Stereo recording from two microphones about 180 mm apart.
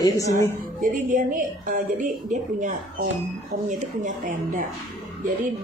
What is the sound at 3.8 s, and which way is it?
Speech, 45° right (ahead or behind).